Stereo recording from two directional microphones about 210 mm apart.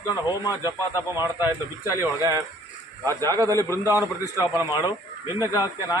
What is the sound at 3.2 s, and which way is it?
Speech, 15° left (ahead or behind).